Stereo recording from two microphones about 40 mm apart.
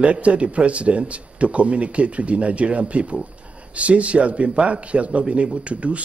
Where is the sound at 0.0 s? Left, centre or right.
Right.